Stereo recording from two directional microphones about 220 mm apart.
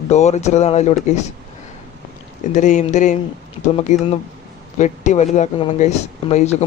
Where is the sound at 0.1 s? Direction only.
30° left (ahead or behind).